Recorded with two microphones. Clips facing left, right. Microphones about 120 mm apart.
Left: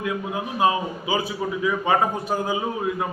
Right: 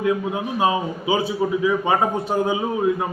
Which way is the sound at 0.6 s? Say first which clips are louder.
Even; 25° right (ahead or behind).